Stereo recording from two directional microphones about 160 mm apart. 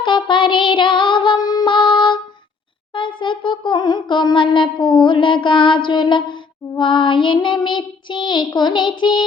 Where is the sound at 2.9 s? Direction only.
30° left (ahead or behind).